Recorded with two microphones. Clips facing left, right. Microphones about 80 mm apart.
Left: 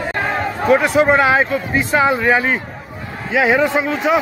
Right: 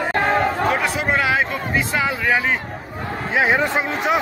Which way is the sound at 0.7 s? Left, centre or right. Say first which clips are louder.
Left 8 dB; left.